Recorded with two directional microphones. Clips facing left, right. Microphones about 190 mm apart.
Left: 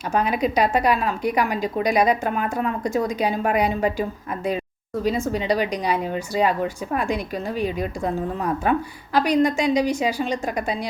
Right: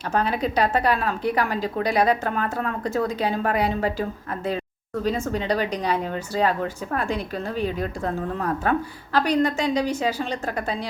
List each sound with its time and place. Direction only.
0.1 s speech: 10° left (ahead or behind)
5.0 s speech: 10° left (ahead or behind)